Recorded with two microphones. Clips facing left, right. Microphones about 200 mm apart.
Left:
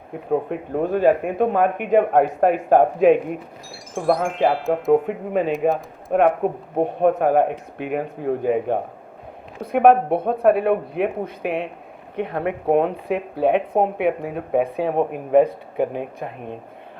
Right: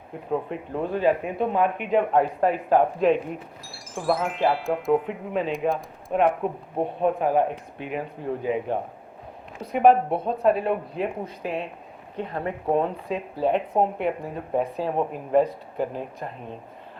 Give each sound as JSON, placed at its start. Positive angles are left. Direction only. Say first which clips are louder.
{"t": 0.3, "sound": "speech", "louder": "left 5 dB", "side_deg": 50}
{"t": 7.0, "sound": "speech", "louder": "left 5 dB", "side_deg": 65}